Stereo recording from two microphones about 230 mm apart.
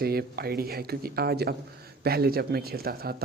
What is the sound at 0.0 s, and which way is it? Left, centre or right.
Speech, right.